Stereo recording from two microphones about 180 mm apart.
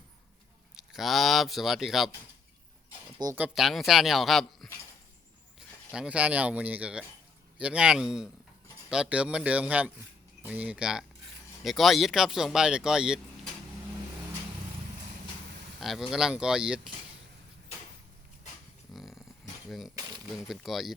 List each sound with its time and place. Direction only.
0.8 s speech: centre (ahead or behind)
3.3 s speech: 5° right (ahead or behind)
15.8 s speech: centre (ahead or behind)
18.9 s dog: centre (ahead or behind)
20.0 s a sound: 20° right (ahead or behind)
20.3 s speech: centre (ahead or behind)